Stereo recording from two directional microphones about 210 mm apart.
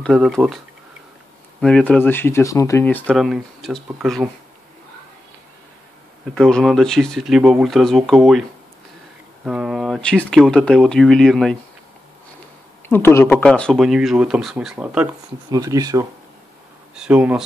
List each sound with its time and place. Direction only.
0.0 s speech: centre (ahead or behind)
1.6 s speech: 5° left (ahead or behind)
6.3 s speech: centre (ahead or behind)
12.8 s speech: 10° left (ahead or behind); by 15.0 s 5° right (ahead or behind)
15.5 s speech: 15° right (ahead or behind)
16.9 s speech: 5° right (ahead or behind)